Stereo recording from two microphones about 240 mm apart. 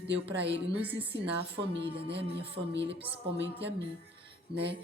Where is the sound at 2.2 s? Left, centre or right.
Right.